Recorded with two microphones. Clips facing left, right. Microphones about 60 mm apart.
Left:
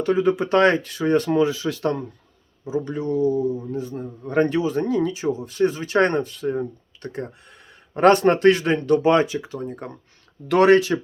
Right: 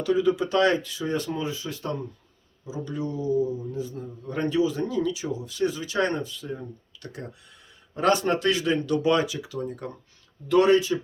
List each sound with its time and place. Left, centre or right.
0.0 s a man's voice: left
2.6 s a man's voice: left
7.9 s a man's voice: left
10.5 s speech: left